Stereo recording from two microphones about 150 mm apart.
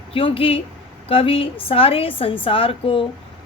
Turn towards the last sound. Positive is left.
turn(degrees=35)  # may be behind; listen again after turning